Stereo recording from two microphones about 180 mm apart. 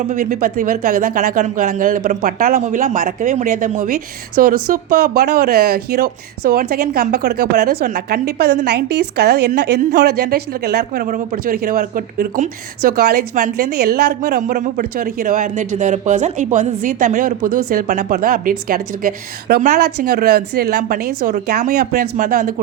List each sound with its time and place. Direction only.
0.0 s speech: 45° right (ahead or behind); by 7.9 s 60° right (ahead or behind)
7.9 s speech: 45° right (ahead or behind)
8.2 s a woman's voice: 65° right (ahead or behind)
13.3 s speech: 45° right (ahead or behind)
13.7 s speech: 60° right (ahead or behind)
19.8 s speech: 60° right (ahead or behind)